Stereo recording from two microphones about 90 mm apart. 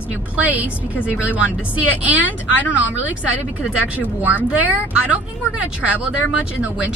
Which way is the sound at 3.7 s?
20° right (ahead or behind).